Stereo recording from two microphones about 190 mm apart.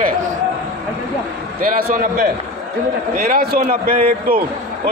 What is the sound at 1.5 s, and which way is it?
A man's voice, 45° right (ahead or behind).